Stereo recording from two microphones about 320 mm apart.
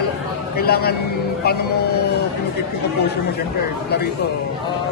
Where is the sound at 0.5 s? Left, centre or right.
Left.